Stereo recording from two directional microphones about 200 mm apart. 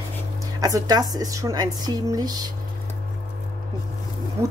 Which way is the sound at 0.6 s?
15° right (ahead or behind).